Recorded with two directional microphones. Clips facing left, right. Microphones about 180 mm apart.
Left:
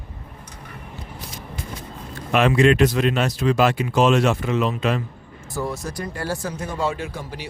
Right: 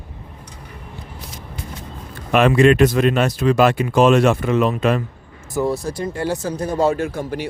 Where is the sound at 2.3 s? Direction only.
55° right (ahead or behind).